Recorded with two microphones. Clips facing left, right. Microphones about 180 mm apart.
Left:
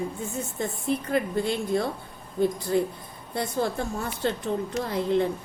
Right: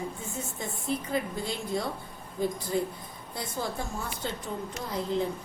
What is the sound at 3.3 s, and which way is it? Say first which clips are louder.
A woman's voice: left 7 dB; 60° left (ahead or behind).